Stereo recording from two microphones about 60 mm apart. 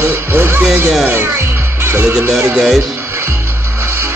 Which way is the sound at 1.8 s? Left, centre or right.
Right.